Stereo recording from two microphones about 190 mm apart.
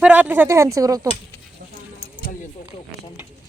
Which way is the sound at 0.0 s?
10° right (ahead or behind).